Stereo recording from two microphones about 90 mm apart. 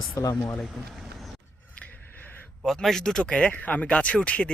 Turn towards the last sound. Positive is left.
turn(degrees=15)  # may be behind; listen again after turning